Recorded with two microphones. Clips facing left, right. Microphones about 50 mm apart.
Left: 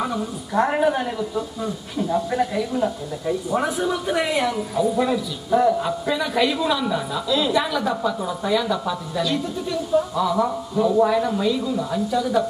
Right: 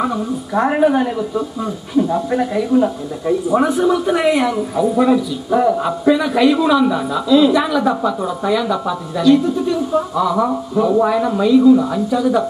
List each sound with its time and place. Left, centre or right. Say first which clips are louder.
0.0 s a man's voice: right 6 dB; centre
3.4 s a man's voice: right 9 dB; centre
10.3 s a man's voice: right 5 dB; centre